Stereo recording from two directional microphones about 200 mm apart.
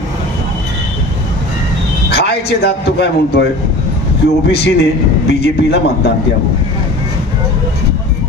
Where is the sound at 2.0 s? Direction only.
55° left (ahead or behind).